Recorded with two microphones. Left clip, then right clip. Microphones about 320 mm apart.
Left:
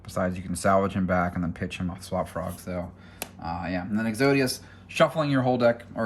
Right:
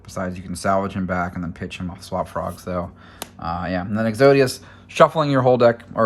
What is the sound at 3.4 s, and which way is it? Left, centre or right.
Speech, right.